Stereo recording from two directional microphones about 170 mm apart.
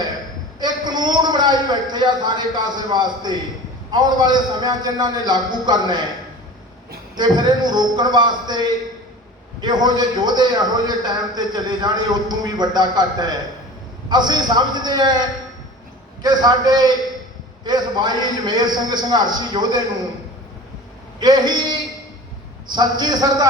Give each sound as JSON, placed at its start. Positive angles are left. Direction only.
{"t": 0.6, "sound": "a man's voice", "side_deg": -25}
{"t": 7.2, "sound": "a man's voice", "side_deg": -25}
{"t": 21.2, "sound": "a man's voice", "side_deg": -25}